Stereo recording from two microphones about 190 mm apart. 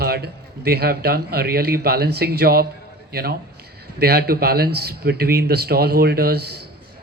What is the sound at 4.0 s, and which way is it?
A man's voice, 55° right (ahead or behind).